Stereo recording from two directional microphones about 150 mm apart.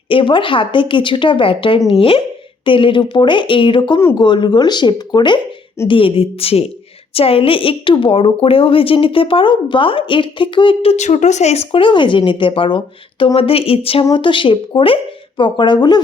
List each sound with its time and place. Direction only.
0.1 s speech: 35° left (ahead or behind)
10.9 s speech: 50° left (ahead or behind); by 16.0 s 30° left (ahead or behind)